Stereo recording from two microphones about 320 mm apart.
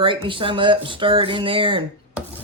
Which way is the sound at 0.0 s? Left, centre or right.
Centre.